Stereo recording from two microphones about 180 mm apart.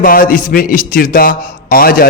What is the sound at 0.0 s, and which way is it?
A man's voice, 55° left (ahead or behind).